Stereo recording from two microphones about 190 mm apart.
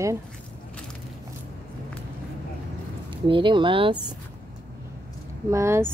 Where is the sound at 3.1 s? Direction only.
25° right (ahead or behind).